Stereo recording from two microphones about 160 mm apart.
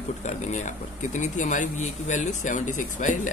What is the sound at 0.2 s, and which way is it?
Speech, 45° left (ahead or behind).